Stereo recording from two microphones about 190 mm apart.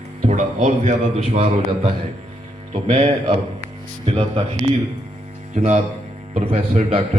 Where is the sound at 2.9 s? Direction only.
45° right (ahead or behind).